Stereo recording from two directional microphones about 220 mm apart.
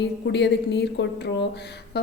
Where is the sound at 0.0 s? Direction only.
50° left (ahead or behind).